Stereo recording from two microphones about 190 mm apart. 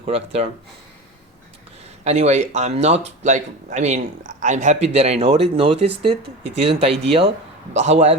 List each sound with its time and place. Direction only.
0.0 s speech: 30° right (ahead or behind)
2.0 s speech: 35° right (ahead or behind)